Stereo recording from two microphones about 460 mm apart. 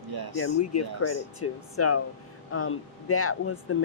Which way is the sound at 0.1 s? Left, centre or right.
Right.